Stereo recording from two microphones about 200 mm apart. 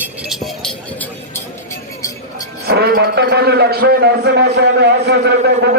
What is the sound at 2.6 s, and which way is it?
A man's voice, 55° right (ahead or behind).